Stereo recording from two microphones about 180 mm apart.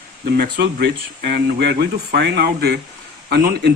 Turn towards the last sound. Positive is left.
turn(degrees=-60)  # may be behind; listen again after turning